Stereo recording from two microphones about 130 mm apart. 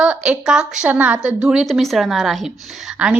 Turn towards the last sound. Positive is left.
turn(degrees=-5)  # may be behind; listen again after turning